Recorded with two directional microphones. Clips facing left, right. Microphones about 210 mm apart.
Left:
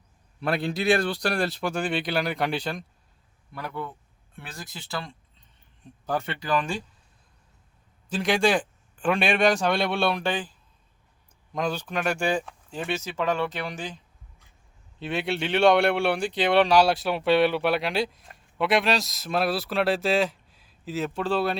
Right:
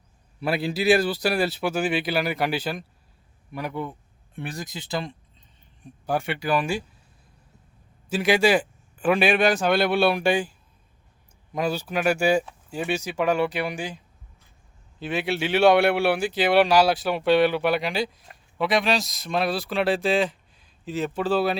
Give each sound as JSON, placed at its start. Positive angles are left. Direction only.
{"t": 0.3, "sound": "a man's voice", "side_deg": -5}
{"t": 8.1, "sound": "speech", "side_deg": -5}
{"t": 11.5, "sound": "a man's voice", "side_deg": -10}